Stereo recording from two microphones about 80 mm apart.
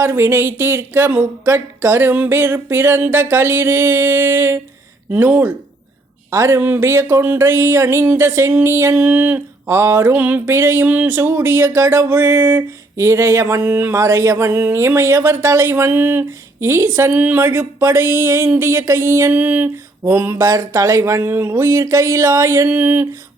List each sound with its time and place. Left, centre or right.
0.0 s speech: right
5.1 s a sound: right
6.3 s speech: right
10.5 s speech: right
13.9 s speech: right
17.1 s speech: right
22.7 s a sound: right